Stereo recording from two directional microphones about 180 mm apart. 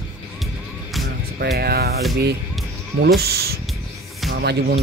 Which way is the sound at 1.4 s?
60° right (ahead or behind).